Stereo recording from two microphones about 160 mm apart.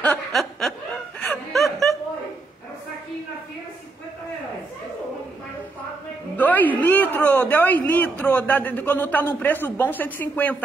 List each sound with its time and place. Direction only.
0.0 s snicker: 5° left (ahead or behind)
1.2 s laughter: centre (ahead or behind)
6.3 s a man's voice: 10° left (ahead or behind)